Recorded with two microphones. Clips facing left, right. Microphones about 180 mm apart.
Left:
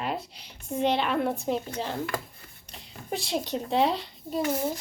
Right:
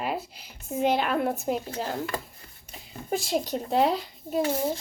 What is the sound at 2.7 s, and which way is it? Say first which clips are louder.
A woman's voice: right 4 dB; 5° right (ahead or behind).